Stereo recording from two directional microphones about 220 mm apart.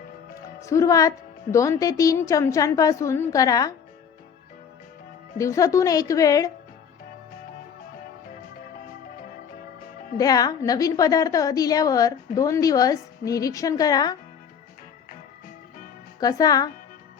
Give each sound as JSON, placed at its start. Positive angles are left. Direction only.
{"t": 0.3, "sound": "a woman's voice", "side_deg": 15}
{"t": 5.4, "sound": "a woman's voice", "side_deg": 15}
{"t": 10.2, "sound": "a woman's voice", "side_deg": 15}
{"t": 16.2, "sound": "a woman's voice", "side_deg": 15}